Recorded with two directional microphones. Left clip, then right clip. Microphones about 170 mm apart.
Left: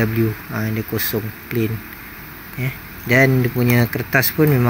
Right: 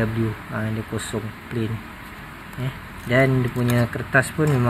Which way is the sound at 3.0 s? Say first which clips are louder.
Left 4 dB; 20° left (ahead or behind).